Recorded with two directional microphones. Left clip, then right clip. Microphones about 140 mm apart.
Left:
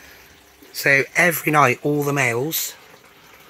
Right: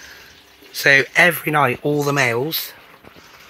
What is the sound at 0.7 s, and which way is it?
Speech, 5° left (ahead or behind).